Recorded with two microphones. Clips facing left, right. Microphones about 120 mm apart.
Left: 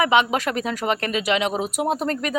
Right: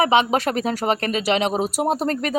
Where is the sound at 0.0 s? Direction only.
30° right (ahead or behind).